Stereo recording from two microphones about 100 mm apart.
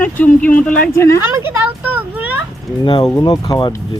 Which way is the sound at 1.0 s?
30° left (ahead or behind).